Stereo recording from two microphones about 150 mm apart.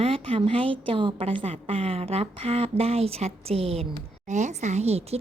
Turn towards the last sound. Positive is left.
turn(degrees=-45)  # may be behind; listen again after turning